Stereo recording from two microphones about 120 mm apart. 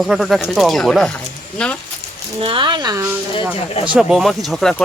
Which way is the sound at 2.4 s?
45° right (ahead or behind).